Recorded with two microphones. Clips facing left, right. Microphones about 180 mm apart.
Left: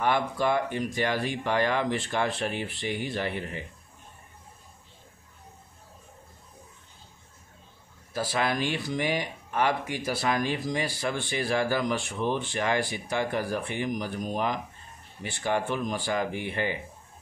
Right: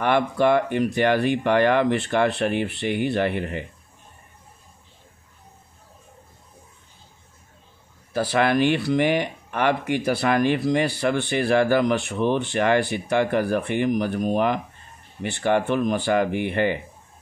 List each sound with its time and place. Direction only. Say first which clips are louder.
0.0 s speech: right 6 dB; 65° right (ahead or behind)
8.1 s speech: right 7 dB; 65° right (ahead or behind)